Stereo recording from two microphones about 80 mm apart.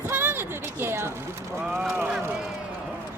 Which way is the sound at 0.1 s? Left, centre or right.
Right.